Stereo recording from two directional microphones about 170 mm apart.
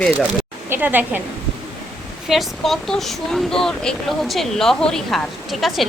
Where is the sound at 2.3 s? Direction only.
Centre (ahead or behind).